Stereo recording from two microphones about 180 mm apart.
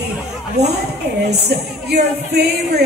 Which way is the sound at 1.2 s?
65° right (ahead or behind).